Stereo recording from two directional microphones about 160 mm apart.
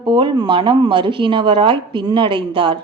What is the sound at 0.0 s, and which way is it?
Speech, 30° right (ahead or behind).